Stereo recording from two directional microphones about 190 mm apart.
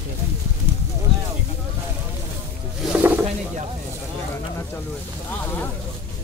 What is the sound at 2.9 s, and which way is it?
Speech, 10° right (ahead or behind).